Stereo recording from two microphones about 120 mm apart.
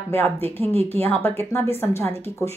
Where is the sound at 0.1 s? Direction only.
15° left (ahead or behind).